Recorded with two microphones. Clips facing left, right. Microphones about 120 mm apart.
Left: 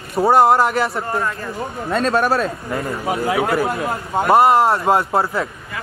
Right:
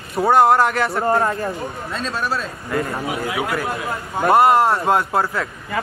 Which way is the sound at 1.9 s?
65° left (ahead or behind).